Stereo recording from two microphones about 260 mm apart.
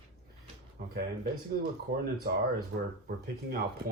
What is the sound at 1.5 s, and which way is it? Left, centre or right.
Speech, right.